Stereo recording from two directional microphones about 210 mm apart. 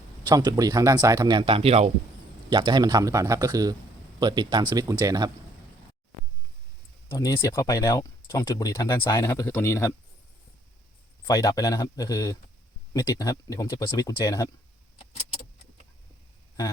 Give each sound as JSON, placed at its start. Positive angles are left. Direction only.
{"t": 0.3, "sound": "speech", "side_deg": -20}
{"t": 7.1, "sound": "speech", "side_deg": 15}
{"t": 11.3, "sound": "speech", "side_deg": 15}